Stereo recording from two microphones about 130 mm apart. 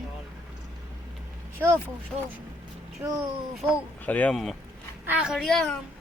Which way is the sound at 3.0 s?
20° right (ahead or behind).